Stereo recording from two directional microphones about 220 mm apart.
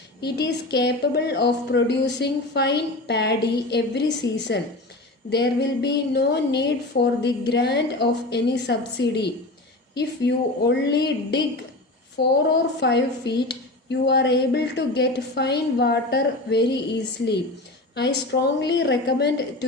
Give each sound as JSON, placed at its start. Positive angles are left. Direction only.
{"t": 0.2, "sound": "speech", "side_deg": 50}
{"t": 17.9, "sound": "speech", "side_deg": 50}